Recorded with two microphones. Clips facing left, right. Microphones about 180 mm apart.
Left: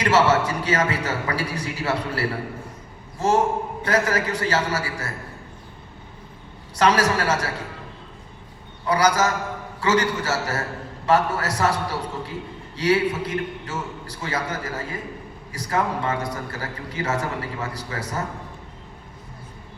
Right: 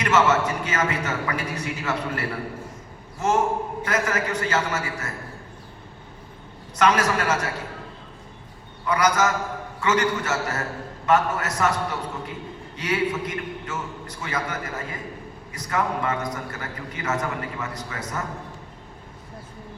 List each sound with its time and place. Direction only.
0.0 s a man's voice: 30° left (ahead or behind)
6.7 s a man's voice: 30° left (ahead or behind)
8.9 s a man's voice: 30° left (ahead or behind)